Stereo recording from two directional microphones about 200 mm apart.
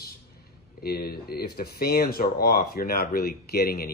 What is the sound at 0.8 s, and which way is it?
Speech, 50° left (ahead or behind).